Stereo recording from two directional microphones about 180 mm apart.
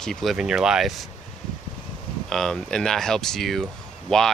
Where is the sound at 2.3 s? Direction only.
5° left (ahead or behind).